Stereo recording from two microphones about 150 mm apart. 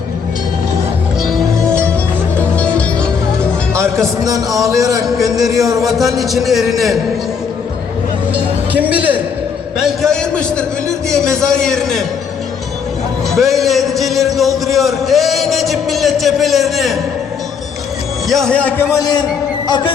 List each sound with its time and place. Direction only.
2.4 s music: 10° left (ahead or behind)
4.0 s speech: 25° right (ahead or behind)
5.1 s a man's voice: centre (ahead or behind)
5.5 s speech: 20° right (ahead or behind)
6.0 s a man's voice: centre (ahead or behind)
8.3 s speech: 10° right (ahead or behind)
9.8 s a man's voice: 5° left (ahead or behind)
13.3 s a man's voice: centre (ahead or behind)
18.3 s a man's voice: centre (ahead or behind)
18.9 s a man's voice: 25° left (ahead or behind)
19.6 s music: 30° left (ahead or behind)